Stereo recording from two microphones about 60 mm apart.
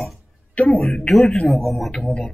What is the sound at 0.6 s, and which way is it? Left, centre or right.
Speech, centre.